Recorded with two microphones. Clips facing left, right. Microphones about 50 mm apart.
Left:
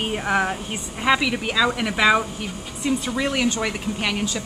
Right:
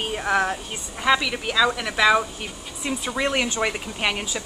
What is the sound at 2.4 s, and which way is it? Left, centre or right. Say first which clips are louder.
Speech: left 4 dB; centre.